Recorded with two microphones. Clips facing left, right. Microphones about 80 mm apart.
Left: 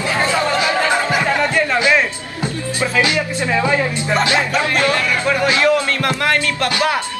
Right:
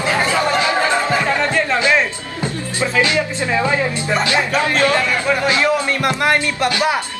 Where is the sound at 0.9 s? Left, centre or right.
Centre.